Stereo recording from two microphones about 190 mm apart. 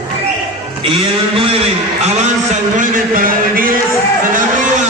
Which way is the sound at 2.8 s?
45° right (ahead or behind).